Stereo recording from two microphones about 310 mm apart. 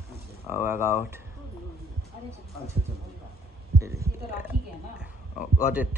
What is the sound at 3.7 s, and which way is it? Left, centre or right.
Speech, centre.